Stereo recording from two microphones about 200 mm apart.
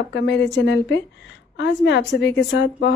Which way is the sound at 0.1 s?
65° left (ahead or behind).